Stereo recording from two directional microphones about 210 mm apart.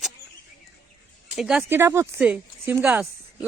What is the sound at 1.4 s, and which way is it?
Speech, 5° right (ahead or behind).